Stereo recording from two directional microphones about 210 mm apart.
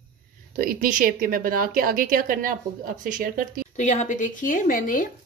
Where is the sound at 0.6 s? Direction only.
40° right (ahead or behind).